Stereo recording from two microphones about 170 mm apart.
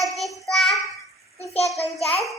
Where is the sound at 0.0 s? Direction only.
Centre (ahead or behind).